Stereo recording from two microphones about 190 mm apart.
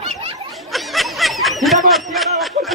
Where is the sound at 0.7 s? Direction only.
Centre (ahead or behind).